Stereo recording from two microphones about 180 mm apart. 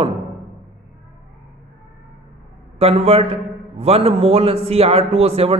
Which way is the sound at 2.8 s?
35° right (ahead or behind).